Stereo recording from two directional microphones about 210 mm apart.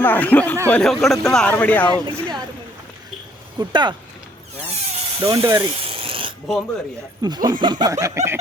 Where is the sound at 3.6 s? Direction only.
20° right (ahead or behind).